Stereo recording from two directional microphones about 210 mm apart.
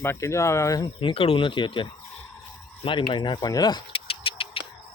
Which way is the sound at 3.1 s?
20° left (ahead or behind).